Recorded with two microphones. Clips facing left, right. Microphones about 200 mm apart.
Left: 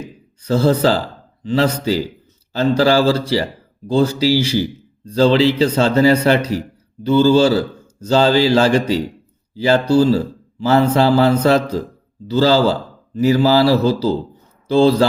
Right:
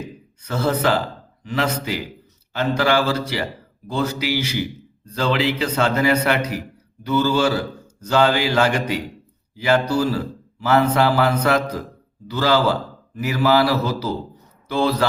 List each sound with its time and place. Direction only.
0.4 s speech: 30° left (ahead or behind)